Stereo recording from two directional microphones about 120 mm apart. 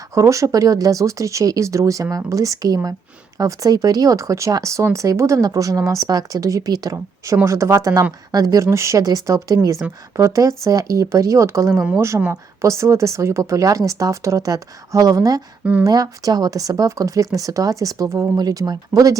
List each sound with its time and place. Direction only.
0.1 s speech: 25° right (ahead or behind)
11.7 s speech: 5° right (ahead or behind)
11.9 s speech: 25° right (ahead or behind)